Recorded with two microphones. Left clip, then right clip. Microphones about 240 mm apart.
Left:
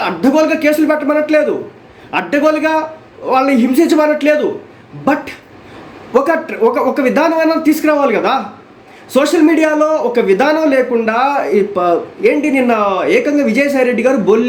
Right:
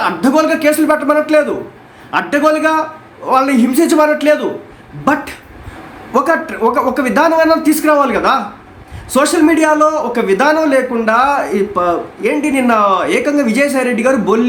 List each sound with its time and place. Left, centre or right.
0.0 s speech: centre